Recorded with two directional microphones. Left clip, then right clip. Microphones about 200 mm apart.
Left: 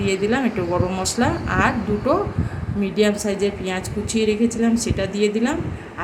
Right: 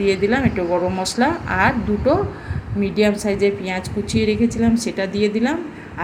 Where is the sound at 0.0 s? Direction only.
5° right (ahead or behind).